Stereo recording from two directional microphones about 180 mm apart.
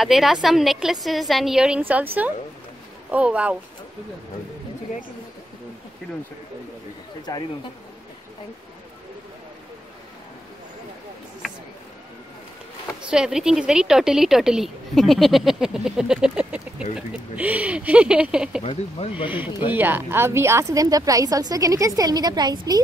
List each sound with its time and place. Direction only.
0.0 s a woman's voice: centre (ahead or behind)
3.1 s speech: 5° right (ahead or behind)
13.1 s a woman's voice: 5° right (ahead or behind)
18.6 s speech: 35° left (ahead or behind)
19.2 s a woman's voice: 10° right (ahead or behind)